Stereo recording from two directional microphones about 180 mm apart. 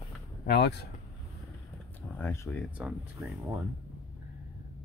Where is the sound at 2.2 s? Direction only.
10° left (ahead or behind).